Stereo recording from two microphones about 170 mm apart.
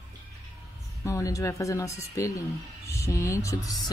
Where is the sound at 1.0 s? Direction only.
20° left (ahead or behind).